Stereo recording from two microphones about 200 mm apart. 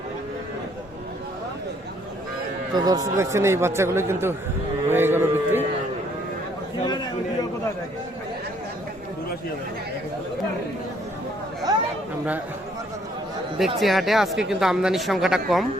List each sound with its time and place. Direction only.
2.7 s a man's voice: 20° right (ahead or behind)
11.7 s chatter: 20° right (ahead or behind)
13.7 s speech: centre (ahead or behind)